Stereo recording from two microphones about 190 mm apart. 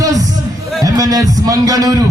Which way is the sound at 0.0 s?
20° right (ahead or behind).